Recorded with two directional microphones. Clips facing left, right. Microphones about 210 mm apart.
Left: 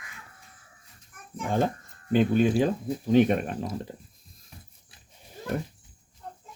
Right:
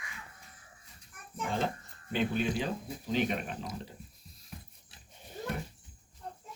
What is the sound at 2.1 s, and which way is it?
Speech, 45° left (ahead or behind).